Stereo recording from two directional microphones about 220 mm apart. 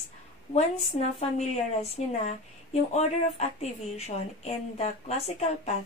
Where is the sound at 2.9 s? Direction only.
30° left (ahead or behind).